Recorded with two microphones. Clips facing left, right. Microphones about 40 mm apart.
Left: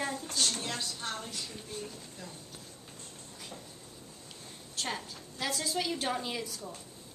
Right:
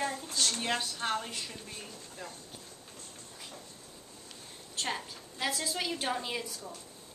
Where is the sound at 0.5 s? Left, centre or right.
Right.